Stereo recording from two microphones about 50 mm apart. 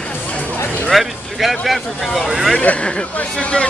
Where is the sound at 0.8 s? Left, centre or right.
Centre.